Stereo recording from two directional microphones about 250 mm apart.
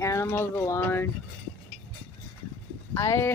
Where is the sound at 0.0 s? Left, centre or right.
Centre.